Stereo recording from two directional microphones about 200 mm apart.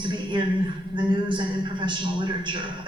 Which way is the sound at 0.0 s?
25° right (ahead or behind).